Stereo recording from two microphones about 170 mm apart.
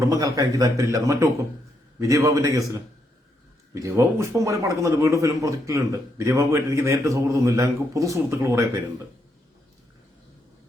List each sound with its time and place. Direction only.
0.1 s a man's voice: 20° right (ahead or behind)